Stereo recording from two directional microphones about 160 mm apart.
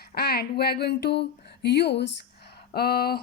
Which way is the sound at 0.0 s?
75° left (ahead or behind).